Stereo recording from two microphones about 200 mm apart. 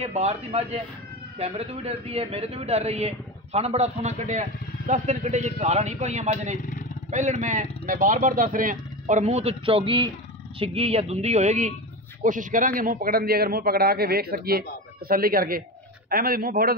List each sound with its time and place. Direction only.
0.0 s a man's voice: 30° right (ahead or behind)